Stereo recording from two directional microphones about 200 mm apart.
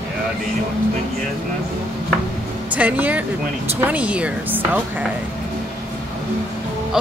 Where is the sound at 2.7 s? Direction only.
10° right (ahead or behind).